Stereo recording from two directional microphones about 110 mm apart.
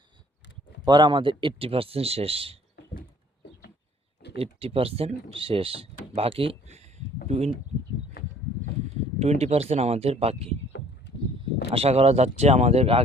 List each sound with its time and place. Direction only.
0.9 s speech: 45° right (ahead or behind); by 2.6 s 60° right (ahead or behind)
4.4 s speech: 60° right (ahead or behind); by 7.5 s 80° right
9.1 s speech: 75° right (ahead or behind)